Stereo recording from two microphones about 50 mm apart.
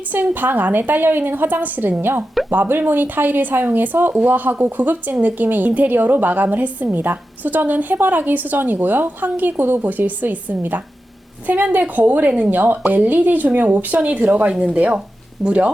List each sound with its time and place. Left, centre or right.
0.1 s speech: right